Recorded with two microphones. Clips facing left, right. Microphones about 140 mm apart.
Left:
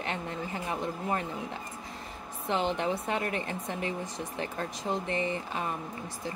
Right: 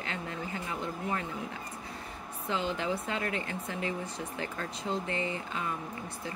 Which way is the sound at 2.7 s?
25° left (ahead or behind).